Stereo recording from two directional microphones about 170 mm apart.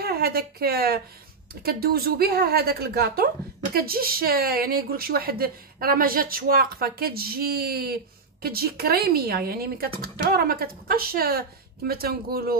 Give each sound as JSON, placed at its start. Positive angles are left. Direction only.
{"t": 0.0, "sound": "a woman's voice", "side_deg": -65}